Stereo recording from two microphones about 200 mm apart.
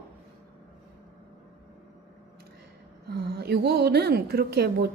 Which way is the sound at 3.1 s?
50° right (ahead or behind).